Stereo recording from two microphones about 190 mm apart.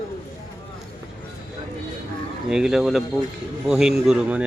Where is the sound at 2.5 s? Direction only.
5° right (ahead or behind).